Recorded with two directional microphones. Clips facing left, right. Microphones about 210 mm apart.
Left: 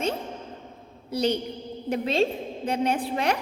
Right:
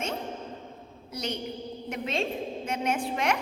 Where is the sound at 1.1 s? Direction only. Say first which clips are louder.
Left 8 dB; 30° left (ahead or behind).